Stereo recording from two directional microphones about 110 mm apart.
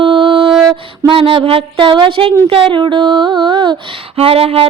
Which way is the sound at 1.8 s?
45° right (ahead or behind).